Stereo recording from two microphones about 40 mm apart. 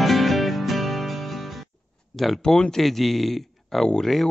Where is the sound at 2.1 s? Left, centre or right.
Centre.